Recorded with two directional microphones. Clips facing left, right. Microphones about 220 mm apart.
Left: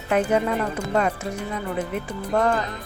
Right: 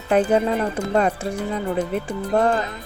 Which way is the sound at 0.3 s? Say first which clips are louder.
Right 3 dB; 30° right (ahead or behind).